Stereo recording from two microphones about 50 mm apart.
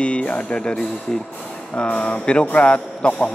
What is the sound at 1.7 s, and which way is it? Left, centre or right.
A man's voice, left.